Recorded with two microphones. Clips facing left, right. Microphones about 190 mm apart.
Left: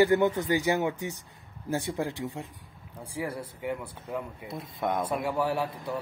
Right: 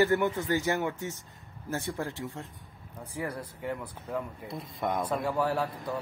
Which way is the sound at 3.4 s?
20° left (ahead or behind).